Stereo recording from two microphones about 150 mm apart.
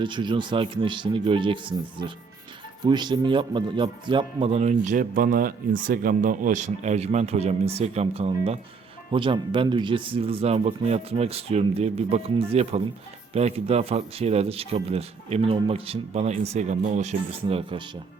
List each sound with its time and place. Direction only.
0.0 s a man's voice: 30° right (ahead or behind); by 17.6 s 50° right (ahead or behind)
17.6 s speech: 35° right (ahead or behind)